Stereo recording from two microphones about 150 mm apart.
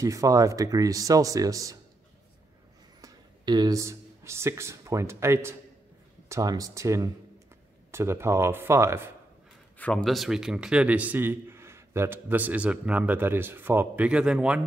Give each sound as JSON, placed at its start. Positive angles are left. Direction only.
{"t": 0.0, "sound": "speech", "side_deg": -20}
{"t": 3.0, "sound": "a man's voice", "side_deg": -25}
{"t": 9.8, "sound": "a man's voice", "side_deg": 10}